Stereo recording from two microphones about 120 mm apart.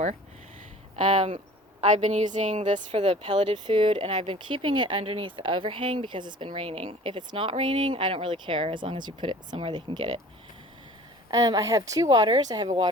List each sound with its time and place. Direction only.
1.0 s a woman's voice: 75° right (ahead or behind)
2.9 s speech: 50° right (ahead or behind)
11.3 s a woman's voice: 30° right (ahead or behind)
12.6 s speech: 45° right (ahead or behind)